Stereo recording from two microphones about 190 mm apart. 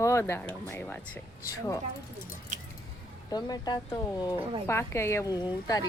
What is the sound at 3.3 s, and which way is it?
Speech, 20° left (ahead or behind).